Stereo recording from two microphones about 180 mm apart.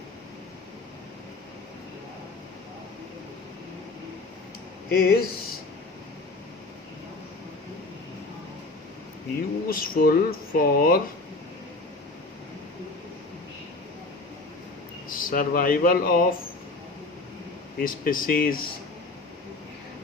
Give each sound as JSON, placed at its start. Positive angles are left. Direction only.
{"t": 4.9, "sound": "speech", "side_deg": 55}
{"t": 9.6, "sound": "speech", "side_deg": 55}
{"t": 15.1, "sound": "speech", "side_deg": 50}
{"t": 17.7, "sound": "speech", "side_deg": 55}